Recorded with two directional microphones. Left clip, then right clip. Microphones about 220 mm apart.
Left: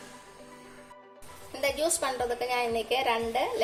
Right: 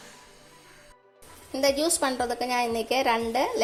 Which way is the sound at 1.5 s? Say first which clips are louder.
Right 4 dB; 25° right (ahead or behind).